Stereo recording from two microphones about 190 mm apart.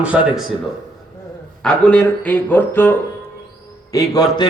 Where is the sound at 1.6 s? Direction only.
5° left (ahead or behind).